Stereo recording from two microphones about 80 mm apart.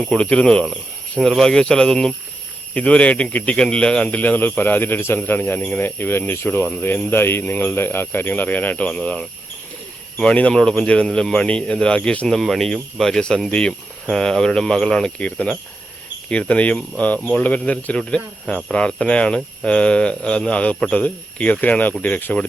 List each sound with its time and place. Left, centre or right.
0.0 s speech: centre
12.3 s speech: centre